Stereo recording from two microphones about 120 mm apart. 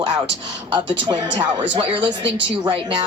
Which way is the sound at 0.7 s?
40° right (ahead or behind).